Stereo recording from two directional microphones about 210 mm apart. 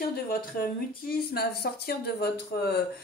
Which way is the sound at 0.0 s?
45° left (ahead or behind).